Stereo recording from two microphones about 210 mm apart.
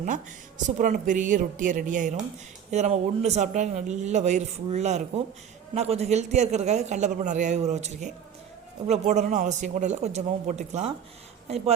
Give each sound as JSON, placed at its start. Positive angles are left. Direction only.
{"t": 0.8, "sound": "speech", "side_deg": -40}